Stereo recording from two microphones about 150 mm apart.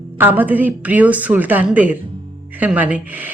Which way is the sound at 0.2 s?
10° right (ahead or behind).